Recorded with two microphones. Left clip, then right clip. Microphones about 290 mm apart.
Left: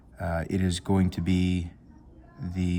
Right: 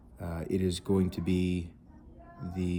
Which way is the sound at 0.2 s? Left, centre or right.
Left.